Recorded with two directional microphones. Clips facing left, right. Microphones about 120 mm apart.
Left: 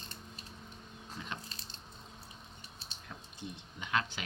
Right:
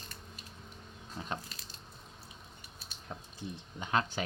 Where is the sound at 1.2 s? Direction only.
40° right (ahead or behind).